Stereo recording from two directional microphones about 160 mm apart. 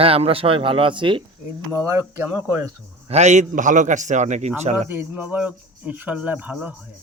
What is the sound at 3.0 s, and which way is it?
A man's voice, 45° right (ahead or behind).